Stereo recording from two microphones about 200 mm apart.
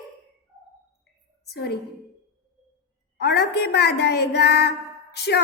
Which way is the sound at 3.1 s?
55° left (ahead or behind).